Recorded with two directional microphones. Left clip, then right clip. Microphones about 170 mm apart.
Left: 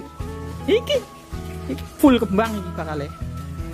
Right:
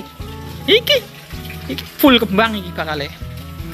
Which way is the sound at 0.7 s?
10° left (ahead or behind).